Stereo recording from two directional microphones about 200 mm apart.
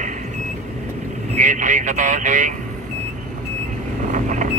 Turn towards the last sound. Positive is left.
turn(degrees=-40)  # may be behind; listen again after turning